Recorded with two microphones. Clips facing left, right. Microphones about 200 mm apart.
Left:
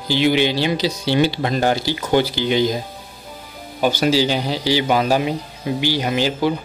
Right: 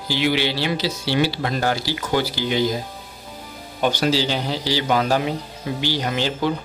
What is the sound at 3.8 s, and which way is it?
Speech, 10° left (ahead or behind).